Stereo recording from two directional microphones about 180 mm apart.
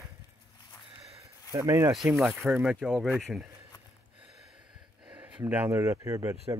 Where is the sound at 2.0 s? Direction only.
Centre (ahead or behind).